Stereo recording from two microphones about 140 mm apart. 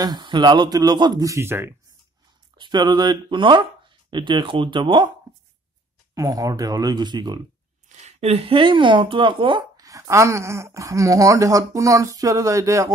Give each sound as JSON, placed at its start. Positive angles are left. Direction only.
{"t": 0.0, "sound": "speech", "side_deg": -30}
{"t": 2.5, "sound": "speech", "side_deg": -30}
{"t": 6.1, "sound": "speech", "side_deg": -25}
{"t": 7.9, "sound": "speech", "side_deg": -55}